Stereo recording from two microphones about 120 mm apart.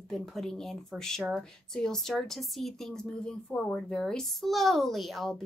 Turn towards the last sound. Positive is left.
turn(degrees=0)  # may be behind; listen again after turning